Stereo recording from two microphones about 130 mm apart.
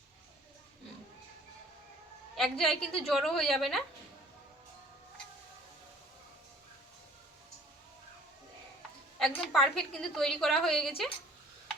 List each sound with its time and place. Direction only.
2.3 s a woman's voice: centre (ahead or behind)
9.1 s a woman's voice: 5° left (ahead or behind)